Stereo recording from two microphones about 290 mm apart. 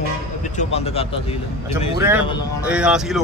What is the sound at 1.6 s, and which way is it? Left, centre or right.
A man's voice, centre.